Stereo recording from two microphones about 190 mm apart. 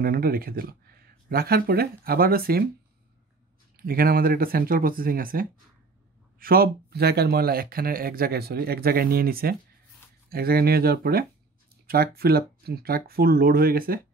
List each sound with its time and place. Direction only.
0.0 s speech: 50° right (ahead or behind)
3.7 s speech: 50° right (ahead or behind)